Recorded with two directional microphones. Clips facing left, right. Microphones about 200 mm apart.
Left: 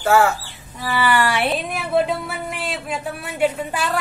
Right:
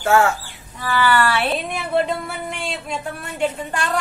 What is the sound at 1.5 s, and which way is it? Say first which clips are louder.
Speech: left 1 dB; centre (ahead or behind).